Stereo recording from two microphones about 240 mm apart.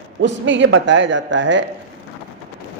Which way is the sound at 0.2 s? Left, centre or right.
Right.